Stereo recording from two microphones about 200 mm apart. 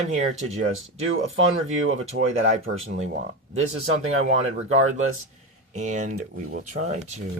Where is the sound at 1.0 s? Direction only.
85° right.